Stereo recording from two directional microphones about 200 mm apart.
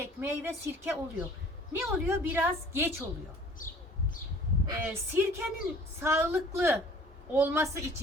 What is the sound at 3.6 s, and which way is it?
Bird, 45° left (ahead or behind).